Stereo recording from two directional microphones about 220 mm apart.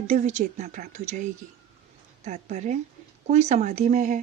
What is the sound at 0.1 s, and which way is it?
Speech, 30° right (ahead or behind).